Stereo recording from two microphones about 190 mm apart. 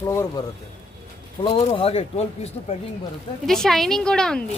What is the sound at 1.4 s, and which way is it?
Speech, 30° left (ahead or behind).